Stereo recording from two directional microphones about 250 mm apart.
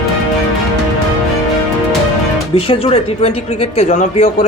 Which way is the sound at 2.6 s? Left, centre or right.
Left.